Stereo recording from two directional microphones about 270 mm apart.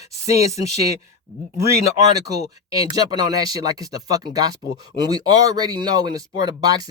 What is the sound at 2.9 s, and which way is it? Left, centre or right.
A man's voice, centre.